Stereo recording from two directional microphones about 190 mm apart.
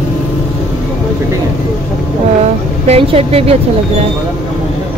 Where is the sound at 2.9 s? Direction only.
30° right (ahead or behind).